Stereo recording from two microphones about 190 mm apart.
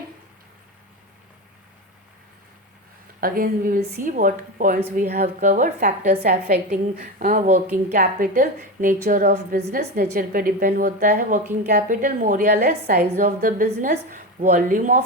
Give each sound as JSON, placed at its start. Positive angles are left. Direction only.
{"t": 3.2, "sound": "a woman's voice", "side_deg": -50}
{"t": 13.2, "sound": "a woman's voice", "side_deg": -45}